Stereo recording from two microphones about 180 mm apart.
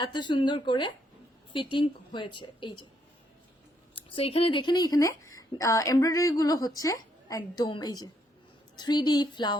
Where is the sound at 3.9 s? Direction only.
30° left (ahead or behind).